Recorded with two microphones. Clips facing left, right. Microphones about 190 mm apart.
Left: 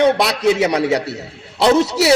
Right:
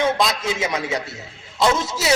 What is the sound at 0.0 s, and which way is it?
A man's voice, 70° left (ahead or behind).